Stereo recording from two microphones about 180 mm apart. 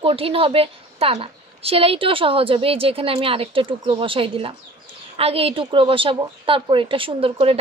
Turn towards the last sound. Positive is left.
turn(degrees=-30)  # may be behind; listen again after turning